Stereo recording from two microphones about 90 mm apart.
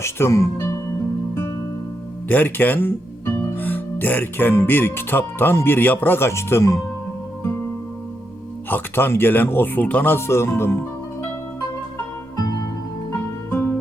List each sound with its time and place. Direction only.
0.0 s speech: 30° left (ahead or behind)
2.2 s speech: 20° left (ahead or behind)
8.7 s speech: 25° left (ahead or behind)
13.5 s music: 25° left (ahead or behind)